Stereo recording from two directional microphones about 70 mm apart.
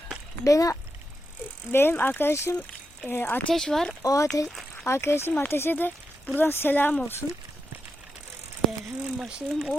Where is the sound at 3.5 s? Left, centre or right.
Centre.